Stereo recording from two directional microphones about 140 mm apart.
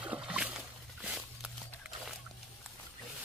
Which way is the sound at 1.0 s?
Centre (ahead or behind).